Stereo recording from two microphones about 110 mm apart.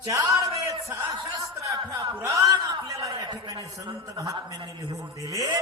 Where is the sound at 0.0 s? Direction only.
30° right (ahead or behind).